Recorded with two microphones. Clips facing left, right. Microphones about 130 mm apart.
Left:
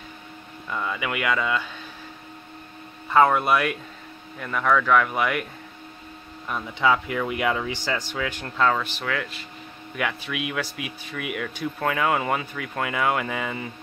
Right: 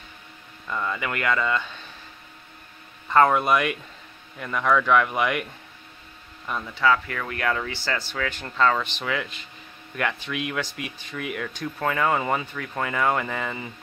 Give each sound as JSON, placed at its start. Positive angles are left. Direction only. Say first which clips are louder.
{"t": 0.7, "sound": "speech", "louder": "even", "side_deg": 5}
{"t": 3.1, "sound": "speech", "louder": "even", "side_deg": 5}
{"t": 6.7, "sound": "speech", "louder": "left 1 dB", "side_deg": 20}